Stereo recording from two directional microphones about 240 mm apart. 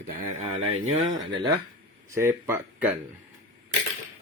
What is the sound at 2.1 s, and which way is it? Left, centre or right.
Speech, centre.